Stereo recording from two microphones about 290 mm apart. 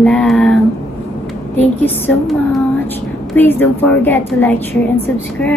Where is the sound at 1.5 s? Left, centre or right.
Centre.